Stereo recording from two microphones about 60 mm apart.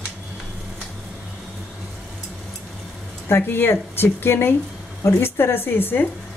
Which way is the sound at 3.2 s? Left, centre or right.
Left.